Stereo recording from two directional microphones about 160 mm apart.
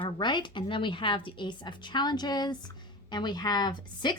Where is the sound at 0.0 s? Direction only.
30° left (ahead or behind).